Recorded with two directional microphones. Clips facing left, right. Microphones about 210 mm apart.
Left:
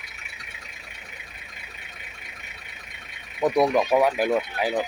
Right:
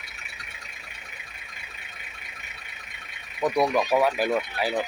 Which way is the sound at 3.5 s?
20° left (ahead or behind).